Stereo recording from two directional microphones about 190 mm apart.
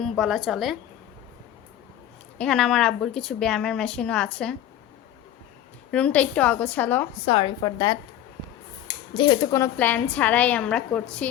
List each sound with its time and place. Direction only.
0.0 s a woman's voice: centre (ahead or behind)
2.4 s a woman's voice: 5° left (ahead or behind)
5.9 s a woman's voice: 5° left (ahead or behind)
7.3 s a woman's voice: 25° left (ahead or behind)
9.1 s a woman's voice: 25° left (ahead or behind); by 11.3 s 5° left (ahead or behind)